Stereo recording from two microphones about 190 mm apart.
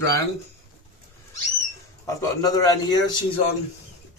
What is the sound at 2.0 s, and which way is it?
A man's voice, 20° left (ahead or behind).